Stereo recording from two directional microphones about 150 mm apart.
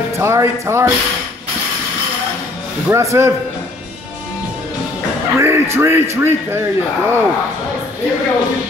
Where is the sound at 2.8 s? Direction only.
20° right (ahead or behind).